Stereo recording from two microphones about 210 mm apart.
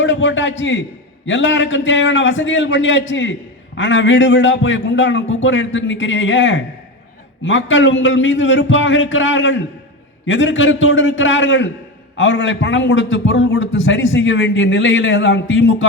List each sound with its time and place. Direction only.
0.0 s a man's voice: 60° left (ahead or behind)